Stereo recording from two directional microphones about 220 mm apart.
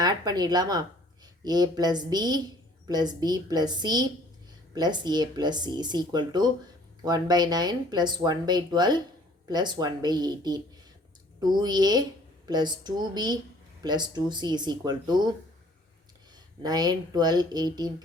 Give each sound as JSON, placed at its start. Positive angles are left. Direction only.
{"t": 0.0, "sound": "speech", "side_deg": -20}
{"t": 16.6, "sound": "speech", "side_deg": -20}